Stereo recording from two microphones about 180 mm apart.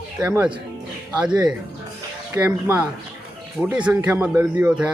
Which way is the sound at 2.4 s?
10° right (ahead or behind).